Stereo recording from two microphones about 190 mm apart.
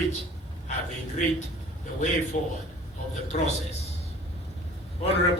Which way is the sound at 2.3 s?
45° left (ahead or behind).